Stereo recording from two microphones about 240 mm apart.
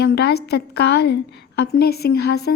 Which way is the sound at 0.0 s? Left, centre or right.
Left.